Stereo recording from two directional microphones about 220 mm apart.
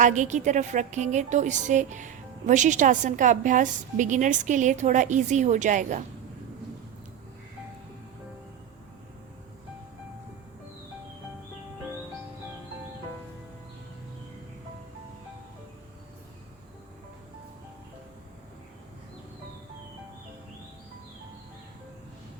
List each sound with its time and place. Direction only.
0.0 s a woman's voice: 35° right (ahead or behind)